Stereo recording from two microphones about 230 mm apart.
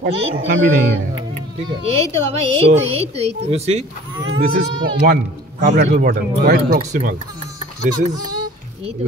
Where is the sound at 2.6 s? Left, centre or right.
Right.